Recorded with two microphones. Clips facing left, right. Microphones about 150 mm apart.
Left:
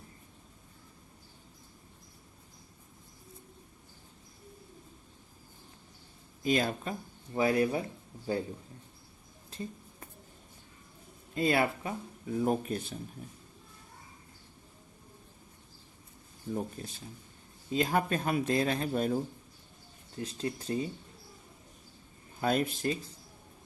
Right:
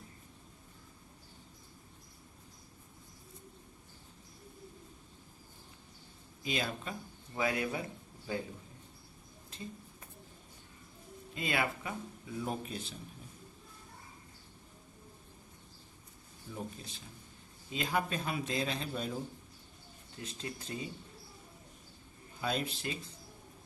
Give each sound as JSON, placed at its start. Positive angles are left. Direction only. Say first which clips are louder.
{"t": 6.4, "sound": "a man's voice", "louder": "left 7 dB", "side_deg": 45}
{"t": 7.3, "sound": "speech", "louder": "left 7 dB", "side_deg": 30}
{"t": 11.3, "sound": "speech", "louder": "left 7 dB", "side_deg": 40}
{"t": 12.4, "sound": "a man's voice", "louder": "left 8 dB", "side_deg": 50}
{"t": 16.5, "sound": "a man's voice", "louder": "left 7 dB", "side_deg": 45}
{"t": 20.1, "sound": "speech", "louder": "left 7 dB", "side_deg": 35}
{"t": 22.4, "sound": "a man's voice", "louder": "left 6 dB", "side_deg": 50}